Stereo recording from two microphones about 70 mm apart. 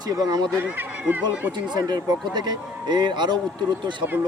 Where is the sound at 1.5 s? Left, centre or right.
Right.